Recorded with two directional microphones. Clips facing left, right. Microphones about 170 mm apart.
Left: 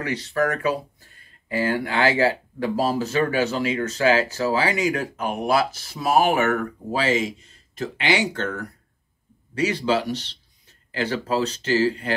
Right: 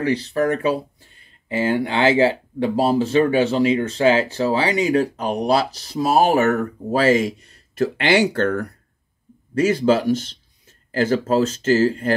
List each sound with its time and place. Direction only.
0.0 s speech: 35° right (ahead or behind); by 8.6 s 60° right (ahead or behind)
9.6 s speech: 50° right (ahead or behind)